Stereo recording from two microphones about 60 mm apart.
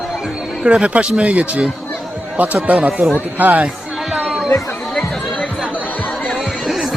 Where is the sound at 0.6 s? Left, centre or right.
Centre.